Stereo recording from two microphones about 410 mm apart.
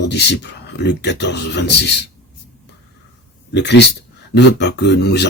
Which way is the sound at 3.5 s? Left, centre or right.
Left.